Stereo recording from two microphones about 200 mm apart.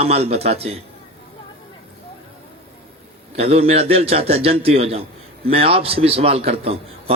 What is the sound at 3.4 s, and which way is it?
A man's voice, 30° right (ahead or behind).